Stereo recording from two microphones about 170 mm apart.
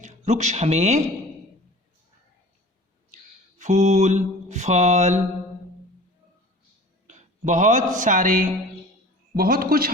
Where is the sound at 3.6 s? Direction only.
45° right (ahead or behind).